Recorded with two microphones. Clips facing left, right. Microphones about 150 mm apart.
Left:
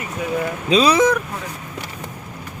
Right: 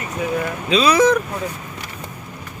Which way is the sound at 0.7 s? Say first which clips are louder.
Left 1 dB; 40° left (ahead or behind).